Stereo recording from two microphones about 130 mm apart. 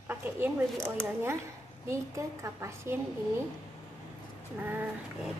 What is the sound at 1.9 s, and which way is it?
A woman's voice, 25° right (ahead or behind).